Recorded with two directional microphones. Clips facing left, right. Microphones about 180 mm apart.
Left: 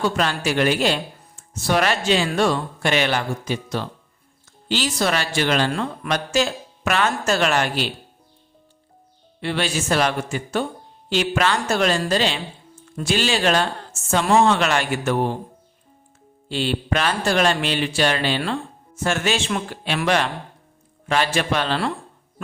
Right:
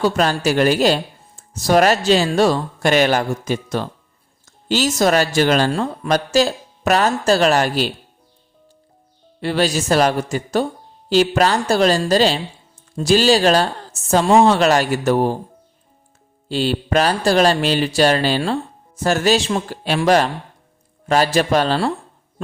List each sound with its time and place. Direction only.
0.0 s speech: 40° right (ahead or behind)
9.4 s speech: 40° right (ahead or behind)
16.5 s speech: 40° right (ahead or behind)